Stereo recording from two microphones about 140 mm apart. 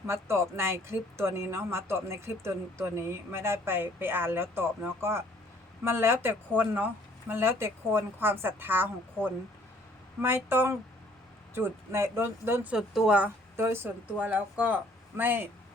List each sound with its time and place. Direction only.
0.1 s speech: 20° right (ahead or behind)
12.7 s speech: 5° right (ahead or behind)